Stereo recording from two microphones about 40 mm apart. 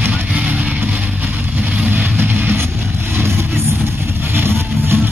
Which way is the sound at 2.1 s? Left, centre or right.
Right.